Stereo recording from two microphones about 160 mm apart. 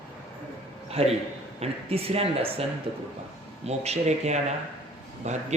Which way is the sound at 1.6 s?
40° right (ahead or behind).